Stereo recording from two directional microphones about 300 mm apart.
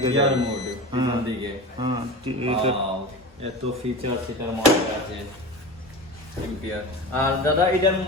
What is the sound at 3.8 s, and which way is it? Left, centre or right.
Speech, centre.